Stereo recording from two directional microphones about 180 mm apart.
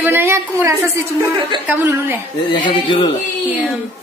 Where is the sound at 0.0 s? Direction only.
15° right (ahead or behind).